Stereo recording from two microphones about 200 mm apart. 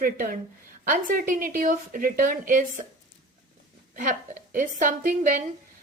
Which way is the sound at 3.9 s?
40° right (ahead or behind).